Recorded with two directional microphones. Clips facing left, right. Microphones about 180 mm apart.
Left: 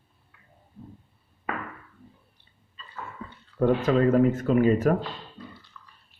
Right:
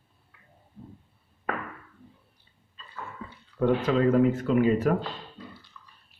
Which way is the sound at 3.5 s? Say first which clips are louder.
Left 2 dB; 45° left (ahead or behind).